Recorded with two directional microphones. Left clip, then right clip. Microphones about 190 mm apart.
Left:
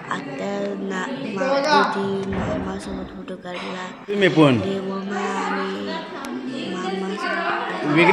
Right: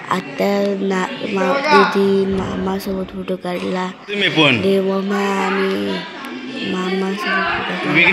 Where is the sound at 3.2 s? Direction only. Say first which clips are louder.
Right 9 dB; 40° right (ahead or behind).